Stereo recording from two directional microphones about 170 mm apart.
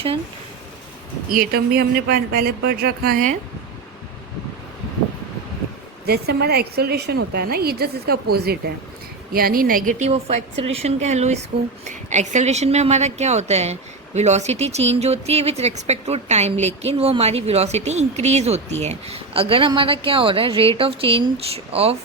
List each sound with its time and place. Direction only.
1.3 s a woman's voice: 60° right (ahead or behind)
6.1 s a woman's voice: 70° right (ahead or behind); by 21.9 s 35° right (ahead or behind)